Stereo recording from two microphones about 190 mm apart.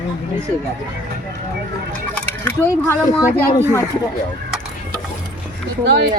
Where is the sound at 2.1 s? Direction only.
10° left (ahead or behind).